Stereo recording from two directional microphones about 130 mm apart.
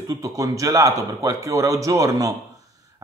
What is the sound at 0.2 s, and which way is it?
Speech, 25° right (ahead or behind).